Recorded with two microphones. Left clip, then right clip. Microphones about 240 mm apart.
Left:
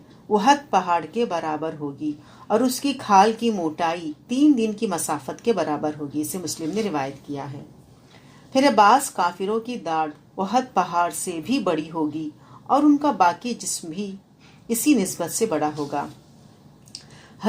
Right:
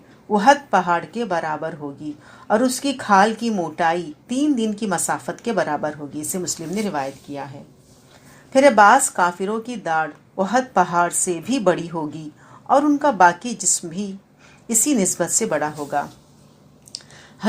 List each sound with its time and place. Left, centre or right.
0.3 s speech: right
8.5 s speech: right